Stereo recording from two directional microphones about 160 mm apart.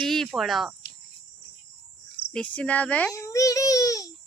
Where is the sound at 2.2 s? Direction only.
80° left.